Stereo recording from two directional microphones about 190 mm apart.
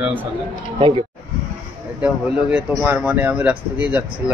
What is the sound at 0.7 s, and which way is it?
Speech, 25° right (ahead or behind).